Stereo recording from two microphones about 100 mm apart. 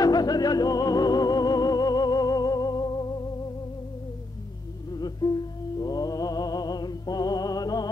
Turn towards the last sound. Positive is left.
turn(degrees=40)  # may be behind; listen again after turning